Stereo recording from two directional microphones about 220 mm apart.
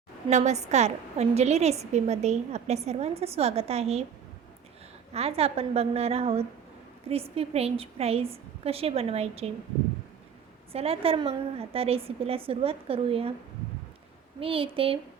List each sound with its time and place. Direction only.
0.3 s a woman's voice: 30° right (ahead or behind)
5.1 s a woman's voice: 25° right (ahead or behind)
10.7 s a woman's voice: 25° right (ahead or behind)
14.3 s a woman's voice: 25° right (ahead or behind)